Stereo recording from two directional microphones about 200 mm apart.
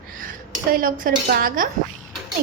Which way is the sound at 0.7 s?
45° right (ahead or behind).